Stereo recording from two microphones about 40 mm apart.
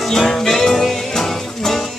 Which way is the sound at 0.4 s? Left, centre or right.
Centre.